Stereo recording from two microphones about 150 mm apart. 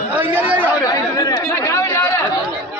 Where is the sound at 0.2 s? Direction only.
10° right (ahead or behind).